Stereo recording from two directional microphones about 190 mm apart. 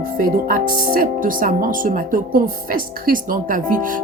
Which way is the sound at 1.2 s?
45° right (ahead or behind).